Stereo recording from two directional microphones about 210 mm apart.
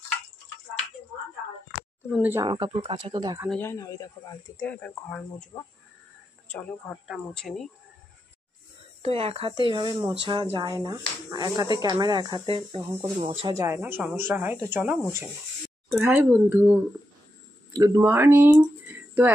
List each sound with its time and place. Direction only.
2.1 s speech: 10° right (ahead or behind)
2.4 s speech: 20° right (ahead or behind)
3.4 s speech: 10° left (ahead or behind)
7.1 s speech: centre (ahead or behind)
9.0 s speech: 30° right (ahead or behind)
13.6 s speech: 15° right (ahead or behind)